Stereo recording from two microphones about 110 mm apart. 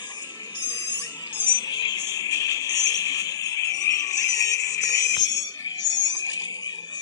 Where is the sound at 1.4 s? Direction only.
40° left (ahead or behind).